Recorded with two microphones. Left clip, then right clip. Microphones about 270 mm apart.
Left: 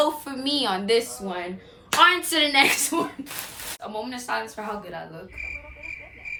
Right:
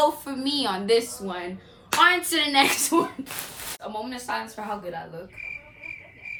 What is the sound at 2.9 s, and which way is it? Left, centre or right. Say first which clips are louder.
Speech: right 3 dB; centre.